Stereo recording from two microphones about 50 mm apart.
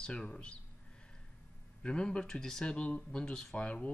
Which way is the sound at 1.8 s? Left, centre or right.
Centre.